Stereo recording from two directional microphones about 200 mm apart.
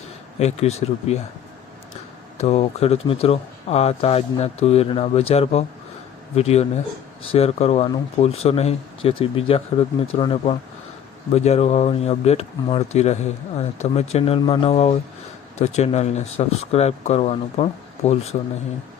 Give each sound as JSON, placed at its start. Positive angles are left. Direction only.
{"t": 0.3, "sound": "speech", "side_deg": 35}
{"t": 2.4, "sound": "speech", "side_deg": 35}